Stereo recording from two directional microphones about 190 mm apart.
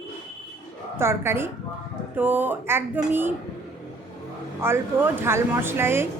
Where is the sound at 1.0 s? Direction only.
15° right (ahead or behind).